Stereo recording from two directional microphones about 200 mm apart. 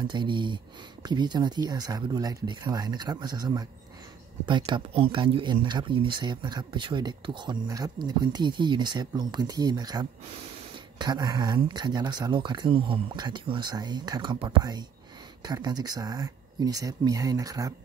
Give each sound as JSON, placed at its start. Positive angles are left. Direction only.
{"t": 0.0, "sound": "speech", "side_deg": -25}